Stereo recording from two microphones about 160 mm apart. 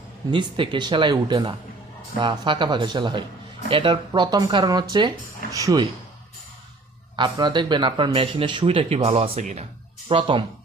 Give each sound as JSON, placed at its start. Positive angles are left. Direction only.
{"t": 0.3, "sound": "speech", "side_deg": -30}
{"t": 7.2, "sound": "speech", "side_deg": -30}
{"t": 10.1, "sound": "speech", "side_deg": -30}